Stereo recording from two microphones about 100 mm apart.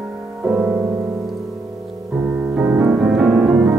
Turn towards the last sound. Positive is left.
turn(degrees=-5)  # may be behind; listen again after turning